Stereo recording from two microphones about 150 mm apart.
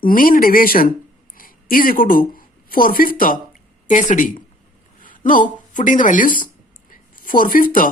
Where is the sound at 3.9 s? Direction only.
60° left (ahead or behind).